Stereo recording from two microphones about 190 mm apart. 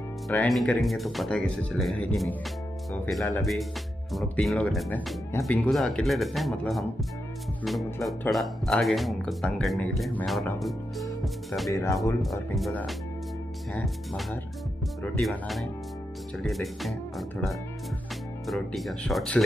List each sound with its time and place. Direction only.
0.3 s speech: 5° left (ahead or behind)
11.7 s speech: 15° left (ahead or behind)
12.2 s speech: centre (ahead or behind)
18.5 s speech: centre (ahead or behind)